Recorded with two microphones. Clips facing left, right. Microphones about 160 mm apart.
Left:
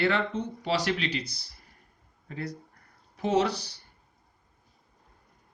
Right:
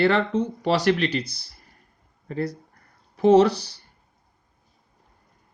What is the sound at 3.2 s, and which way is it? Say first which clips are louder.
Speech: right 10 dB; 65° right (ahead or behind).